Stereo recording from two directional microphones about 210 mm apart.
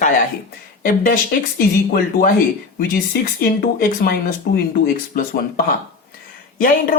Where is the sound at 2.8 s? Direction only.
45° left (ahead or behind).